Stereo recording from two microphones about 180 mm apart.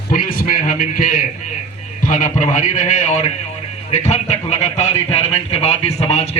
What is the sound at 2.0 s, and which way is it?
A man's voice, 45° left (ahead or behind).